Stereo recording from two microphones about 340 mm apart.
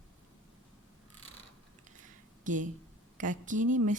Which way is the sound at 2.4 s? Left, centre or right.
Right.